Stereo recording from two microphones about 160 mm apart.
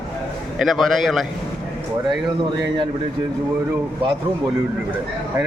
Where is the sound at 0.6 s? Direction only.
Centre (ahead or behind).